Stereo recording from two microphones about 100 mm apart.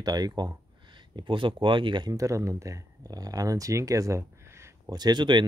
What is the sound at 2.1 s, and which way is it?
Speech, 35° right (ahead or behind).